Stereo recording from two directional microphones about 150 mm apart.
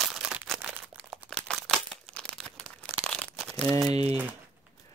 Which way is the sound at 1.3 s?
5° left (ahead or behind).